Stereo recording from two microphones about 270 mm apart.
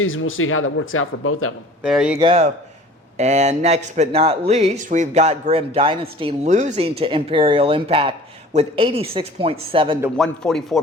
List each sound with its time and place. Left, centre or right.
0.0 s speech: left
1.8 s a man's voice: centre
2.1 s speech: centre
10.0 s a man's voice: centre